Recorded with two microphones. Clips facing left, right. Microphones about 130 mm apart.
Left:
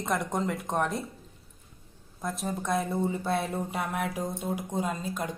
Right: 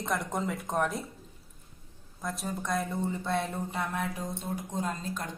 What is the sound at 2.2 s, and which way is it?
Speech, centre (ahead or behind).